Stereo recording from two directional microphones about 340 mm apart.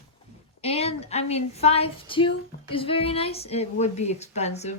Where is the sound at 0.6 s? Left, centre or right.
Centre.